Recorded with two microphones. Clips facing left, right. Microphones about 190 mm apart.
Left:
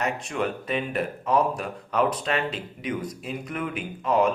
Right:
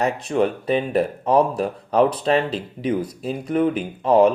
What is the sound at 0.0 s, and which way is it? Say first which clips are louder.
Speech: right 7 dB; 35° right (ahead or behind).